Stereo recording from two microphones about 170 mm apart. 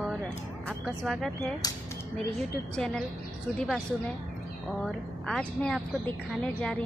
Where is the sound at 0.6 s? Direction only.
5° right (ahead or behind).